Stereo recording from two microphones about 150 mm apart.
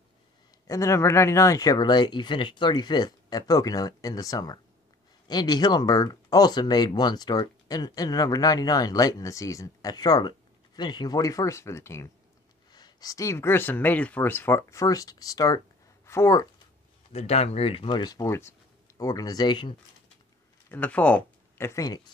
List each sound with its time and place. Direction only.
0.7 s speech: 20° left (ahead or behind)
17.1 s speech: 40° left (ahead or behind)
20.7 s speech: 10° left (ahead or behind); by 22.1 s 25° left (ahead or behind)